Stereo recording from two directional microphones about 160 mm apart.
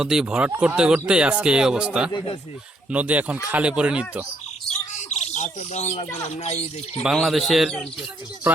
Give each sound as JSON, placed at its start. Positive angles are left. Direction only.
{"t": 0.0, "sound": "speech", "side_deg": -5}
{"t": 2.1, "sound": "speech", "side_deg": 30}
{"t": 2.9, "sound": "speech", "side_deg": -10}
{"t": 5.0, "sound": "speech", "side_deg": 45}
{"t": 7.0, "sound": "speech", "side_deg": 0}